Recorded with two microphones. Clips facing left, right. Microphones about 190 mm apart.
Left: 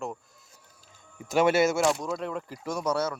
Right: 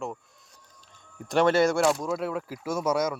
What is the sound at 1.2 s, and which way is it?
Speech, 5° left (ahead or behind).